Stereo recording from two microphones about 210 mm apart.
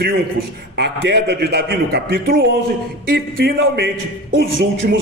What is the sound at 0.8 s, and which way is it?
A man's voice, 55° right (ahead or behind).